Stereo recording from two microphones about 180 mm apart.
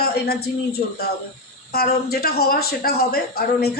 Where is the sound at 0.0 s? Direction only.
60° left (ahead or behind).